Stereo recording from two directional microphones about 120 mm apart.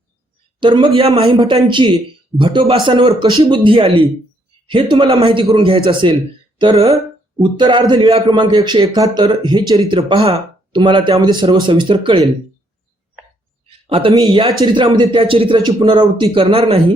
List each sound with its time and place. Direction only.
0.6 s a man's voice: 45° right (ahead or behind)
13.8 s a man's voice: 50° right (ahead or behind)